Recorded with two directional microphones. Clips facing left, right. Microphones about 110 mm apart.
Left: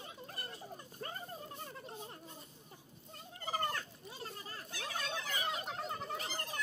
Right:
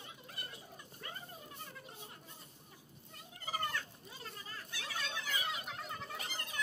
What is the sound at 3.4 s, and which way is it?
Fowl, 35° left (ahead or behind).